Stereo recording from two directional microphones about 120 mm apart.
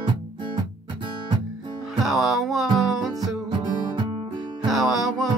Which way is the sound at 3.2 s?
40° right (ahead or behind).